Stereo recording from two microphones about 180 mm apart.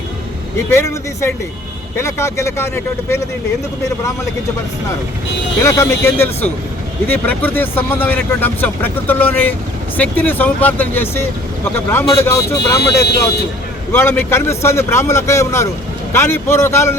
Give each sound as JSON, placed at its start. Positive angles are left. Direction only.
{"t": 0.7, "sound": "speech", "side_deg": 15}
{"t": 5.6, "sound": "speech", "side_deg": 15}